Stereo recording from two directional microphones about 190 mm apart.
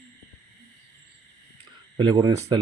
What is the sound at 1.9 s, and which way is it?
Speech, 20° right (ahead or behind).